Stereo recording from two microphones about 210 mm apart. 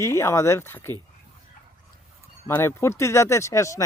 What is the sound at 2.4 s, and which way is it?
Speech, 10° left (ahead or behind).